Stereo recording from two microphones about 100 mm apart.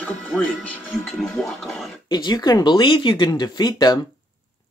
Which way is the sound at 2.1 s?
45° left (ahead or behind).